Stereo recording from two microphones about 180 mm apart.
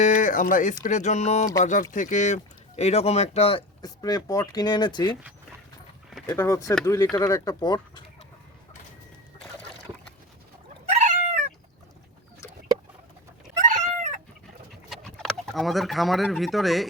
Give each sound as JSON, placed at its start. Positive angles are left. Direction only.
{"t": 0.0, "sound": "a sound", "side_deg": 45}
{"t": 0.9, "sound": "speech", "side_deg": 40}
{"t": 6.2, "sound": "speech", "side_deg": 15}
{"t": 10.8, "sound": "cat", "side_deg": -40}
{"t": 13.6, "sound": "chicken", "side_deg": -45}
{"t": 14.8, "sound": "speech", "side_deg": 0}